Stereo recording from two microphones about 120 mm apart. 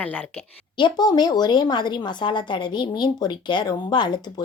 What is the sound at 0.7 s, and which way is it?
A woman's voice, 40° left (ahead or behind).